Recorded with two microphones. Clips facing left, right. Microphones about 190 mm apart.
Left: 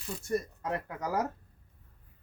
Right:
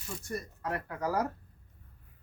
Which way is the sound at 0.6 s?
20° left (ahead or behind).